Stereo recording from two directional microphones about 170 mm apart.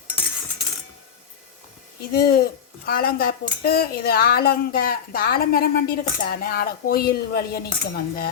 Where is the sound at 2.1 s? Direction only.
65° left (ahead or behind).